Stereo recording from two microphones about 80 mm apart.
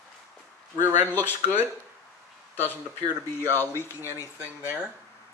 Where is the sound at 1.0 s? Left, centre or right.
Left.